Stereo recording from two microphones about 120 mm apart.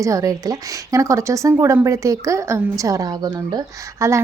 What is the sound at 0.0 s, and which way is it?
Speech, 25° right (ahead or behind).